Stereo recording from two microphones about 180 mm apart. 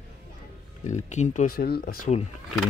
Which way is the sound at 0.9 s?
40° left (ahead or behind).